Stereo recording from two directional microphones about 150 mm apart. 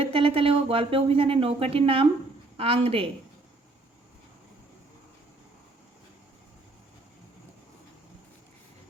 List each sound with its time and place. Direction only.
0.0 s speech: 40° right (ahead or behind)